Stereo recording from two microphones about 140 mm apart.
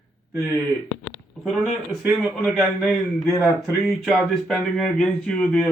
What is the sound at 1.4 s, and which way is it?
Speech, centre (ahead or behind).